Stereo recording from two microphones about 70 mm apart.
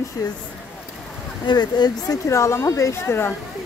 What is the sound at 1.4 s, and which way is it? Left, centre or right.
Speech, left.